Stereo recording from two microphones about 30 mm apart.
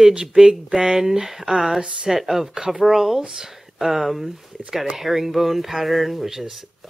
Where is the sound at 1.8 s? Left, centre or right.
Right.